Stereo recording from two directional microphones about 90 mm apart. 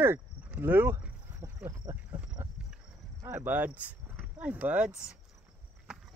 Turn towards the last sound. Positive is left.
turn(degrees=-5)  # may be behind; listen again after turning